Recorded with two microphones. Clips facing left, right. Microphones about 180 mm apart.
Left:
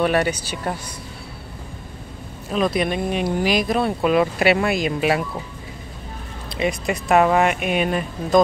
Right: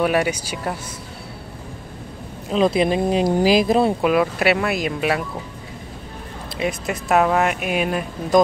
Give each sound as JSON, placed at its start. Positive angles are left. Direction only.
{"t": 0.0, "sound": "speech", "side_deg": -10}
{"t": 2.5, "sound": "speech", "side_deg": -25}
{"t": 4.0, "sound": "speech", "side_deg": -5}
{"t": 6.5, "sound": "speech", "side_deg": 0}